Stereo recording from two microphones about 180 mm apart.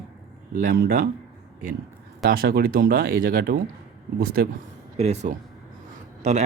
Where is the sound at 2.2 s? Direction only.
55° right (ahead or behind).